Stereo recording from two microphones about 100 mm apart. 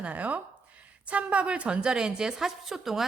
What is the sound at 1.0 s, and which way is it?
A woman's voice, 10° right (ahead or behind).